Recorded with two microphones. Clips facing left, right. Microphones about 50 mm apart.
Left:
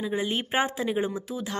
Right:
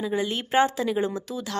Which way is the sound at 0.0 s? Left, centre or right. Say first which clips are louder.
Right 1 dB; centre.